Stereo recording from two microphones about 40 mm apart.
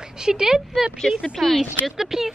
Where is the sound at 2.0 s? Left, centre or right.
Centre.